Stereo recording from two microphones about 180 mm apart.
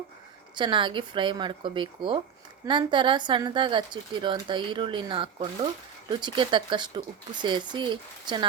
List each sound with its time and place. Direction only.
0.5 s speech: 25° right (ahead or behind)